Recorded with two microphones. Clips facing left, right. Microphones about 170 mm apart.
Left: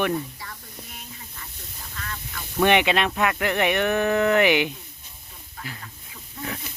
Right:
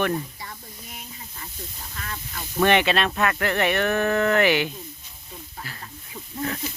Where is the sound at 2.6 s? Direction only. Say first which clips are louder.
Even; 15° left (ahead or behind).